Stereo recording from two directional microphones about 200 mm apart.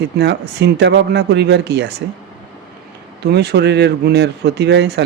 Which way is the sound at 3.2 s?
55° right (ahead or behind).